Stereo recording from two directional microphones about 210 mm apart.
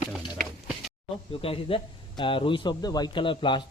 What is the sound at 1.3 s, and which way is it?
A man's voice, 25° left (ahead or behind).